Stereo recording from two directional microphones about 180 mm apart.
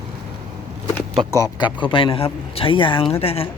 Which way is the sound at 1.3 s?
20° left (ahead or behind).